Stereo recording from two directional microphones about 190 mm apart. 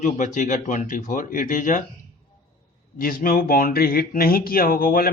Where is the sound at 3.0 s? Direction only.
50° left (ahead or behind).